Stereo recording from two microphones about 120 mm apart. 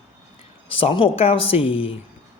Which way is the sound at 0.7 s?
50° left (ahead or behind).